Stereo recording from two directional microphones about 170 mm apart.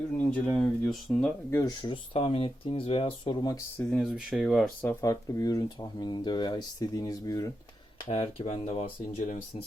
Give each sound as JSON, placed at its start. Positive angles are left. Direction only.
{"t": 0.3, "sound": "speech", "side_deg": 5}
{"t": 1.5, "sound": "speech", "side_deg": 15}
{"t": 1.8, "sound": "speech", "side_deg": 30}
{"t": 3.8, "sound": "speech", "side_deg": 0}
{"t": 4.9, "sound": "speech", "side_deg": 15}
{"t": 8.1, "sound": "speech", "side_deg": 35}